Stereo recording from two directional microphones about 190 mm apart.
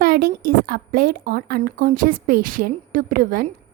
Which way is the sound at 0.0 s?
55° right (ahead or behind).